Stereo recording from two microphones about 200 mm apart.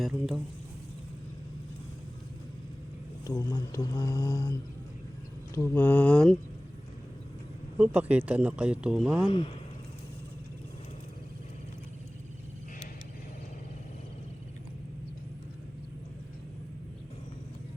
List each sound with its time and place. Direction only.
0.0 s speech: centre (ahead or behind)
3.2 s speech: 15° left (ahead or behind)
5.5 s speech: 10° left (ahead or behind)
7.8 s speech: 5° right (ahead or behind)